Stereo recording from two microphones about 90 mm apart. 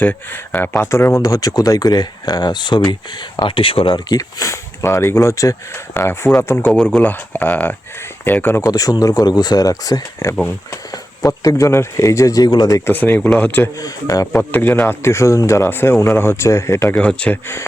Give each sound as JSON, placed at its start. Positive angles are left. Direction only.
{"t": 0.0, "sound": "speech", "side_deg": 20}
{"t": 1.2, "sound": "speech", "side_deg": 40}
{"t": 4.2, "sound": "speech", "side_deg": 35}
{"t": 5.9, "sound": "speech", "side_deg": 25}
{"t": 6.7, "sound": "speech", "side_deg": 15}
{"t": 8.6, "sound": "speech", "side_deg": 45}
{"t": 12.5, "sound": "speech", "side_deg": 55}
{"t": 12.9, "sound": "speech", "side_deg": 20}
{"t": 13.7, "sound": "speech", "side_deg": 40}
{"t": 14.5, "sound": "speech", "side_deg": 20}
{"t": 16.9, "sound": "speech", "side_deg": 10}